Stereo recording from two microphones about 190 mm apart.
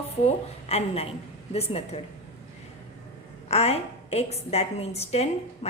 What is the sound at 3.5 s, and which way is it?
A woman's voice, 35° left (ahead or behind).